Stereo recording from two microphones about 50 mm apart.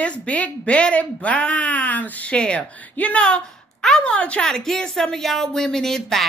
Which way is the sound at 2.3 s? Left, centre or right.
Left.